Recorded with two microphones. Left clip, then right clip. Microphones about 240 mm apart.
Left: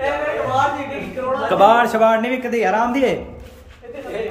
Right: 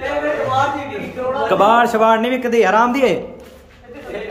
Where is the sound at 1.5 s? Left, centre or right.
Centre.